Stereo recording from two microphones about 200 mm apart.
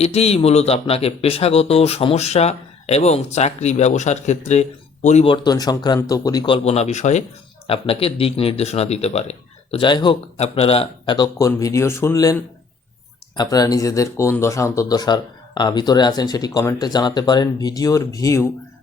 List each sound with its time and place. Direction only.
0.0 s speech: 30° left (ahead or behind)